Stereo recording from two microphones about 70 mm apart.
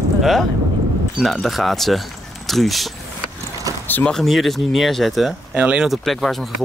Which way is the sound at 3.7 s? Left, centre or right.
Right.